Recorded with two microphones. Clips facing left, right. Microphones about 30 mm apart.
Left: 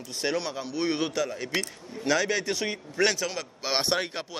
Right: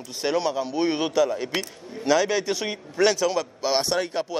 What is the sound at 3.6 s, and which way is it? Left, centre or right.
Speech, centre.